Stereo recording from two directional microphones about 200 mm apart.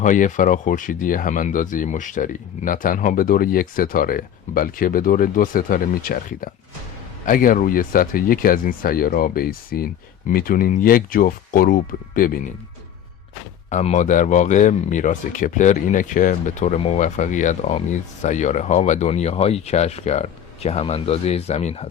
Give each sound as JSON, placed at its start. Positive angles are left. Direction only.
{"t": 0.0, "sound": "speech", "side_deg": 40}
{"t": 13.7, "sound": "speech", "side_deg": 35}